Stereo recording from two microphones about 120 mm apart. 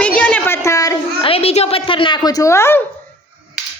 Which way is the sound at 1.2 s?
55° left (ahead or behind).